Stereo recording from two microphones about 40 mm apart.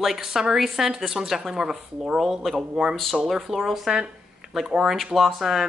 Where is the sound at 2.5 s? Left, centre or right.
Centre.